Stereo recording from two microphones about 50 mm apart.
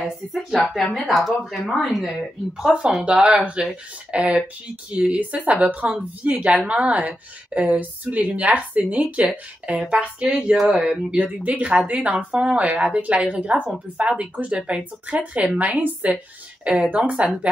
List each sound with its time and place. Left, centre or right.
0.0 s speech: centre
2.6 s a woman's voice: right